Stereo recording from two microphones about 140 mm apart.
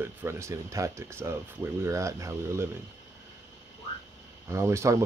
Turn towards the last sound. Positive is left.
turn(degrees=-20)  # may be behind; listen again after turning